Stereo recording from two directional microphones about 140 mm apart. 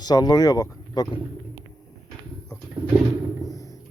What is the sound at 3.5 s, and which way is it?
Music, 25° left (ahead or behind).